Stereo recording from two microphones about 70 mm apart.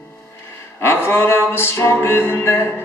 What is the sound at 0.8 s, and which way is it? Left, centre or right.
Music, left.